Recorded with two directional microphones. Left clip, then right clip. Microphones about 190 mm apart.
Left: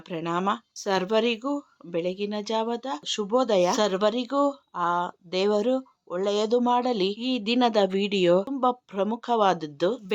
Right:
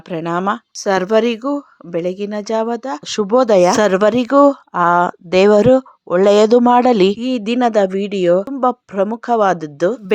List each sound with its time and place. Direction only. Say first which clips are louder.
0.1 s speech: right 8 dB; 40° right (ahead or behind)
7.2 s speech: right 7 dB; 30° right (ahead or behind)